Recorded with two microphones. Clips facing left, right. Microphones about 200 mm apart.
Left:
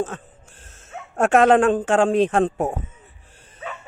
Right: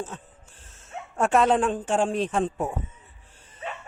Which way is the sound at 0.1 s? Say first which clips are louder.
Left 5 dB; 90° left.